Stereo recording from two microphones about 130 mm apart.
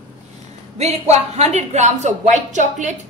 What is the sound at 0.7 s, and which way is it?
A woman's voice, 55° right (ahead or behind).